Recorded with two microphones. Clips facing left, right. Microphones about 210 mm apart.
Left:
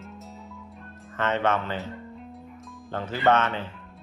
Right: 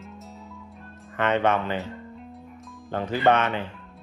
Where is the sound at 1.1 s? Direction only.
15° right (ahead or behind).